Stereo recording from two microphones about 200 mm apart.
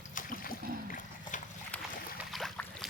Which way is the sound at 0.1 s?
40° left (ahead or behind).